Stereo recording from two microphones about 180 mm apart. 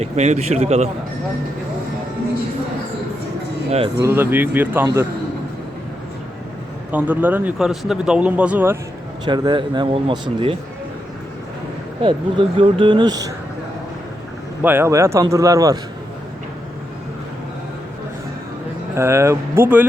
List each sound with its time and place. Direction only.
0.0 s speech: 35° right (ahead or behind)
4.0 s speech: 10° right (ahead or behind)
6.9 s speech: 10° right (ahead or behind)
9.2 s speech: 25° right (ahead or behind)
12.0 s speech: 30° right (ahead or behind)
14.6 s speech: 10° right (ahead or behind)
18.9 s speech: 15° right (ahead or behind)